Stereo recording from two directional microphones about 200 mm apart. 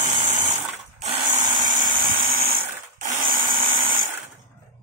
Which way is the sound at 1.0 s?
35° right (ahead or behind).